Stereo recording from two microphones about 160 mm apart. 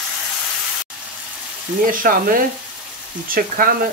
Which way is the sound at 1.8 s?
60° right (ahead or behind).